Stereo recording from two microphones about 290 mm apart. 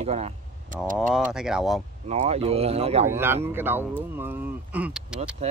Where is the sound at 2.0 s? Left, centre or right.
Right.